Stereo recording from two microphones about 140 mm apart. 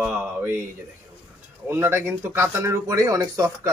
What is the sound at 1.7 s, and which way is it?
Speech, 15° right (ahead or behind).